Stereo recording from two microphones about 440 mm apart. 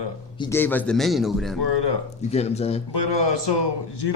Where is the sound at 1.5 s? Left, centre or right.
Left.